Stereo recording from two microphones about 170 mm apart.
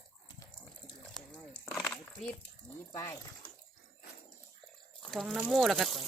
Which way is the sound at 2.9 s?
15° left (ahead or behind).